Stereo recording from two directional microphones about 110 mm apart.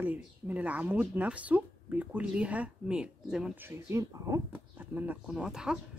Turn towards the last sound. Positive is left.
turn(degrees=-5)  # may be behind; listen again after turning